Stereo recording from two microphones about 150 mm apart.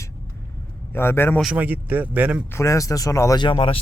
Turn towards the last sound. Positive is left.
turn(degrees=35)  # may be behind; listen again after turning